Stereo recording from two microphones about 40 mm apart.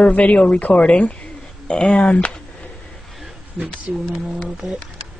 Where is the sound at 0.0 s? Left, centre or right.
Left.